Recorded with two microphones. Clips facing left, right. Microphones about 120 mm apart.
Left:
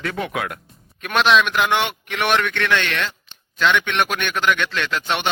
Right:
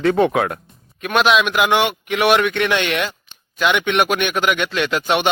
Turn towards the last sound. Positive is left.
turn(degrees=-10)  # may be behind; listen again after turning